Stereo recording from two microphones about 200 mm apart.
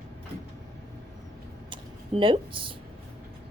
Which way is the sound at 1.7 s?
25° right (ahead or behind).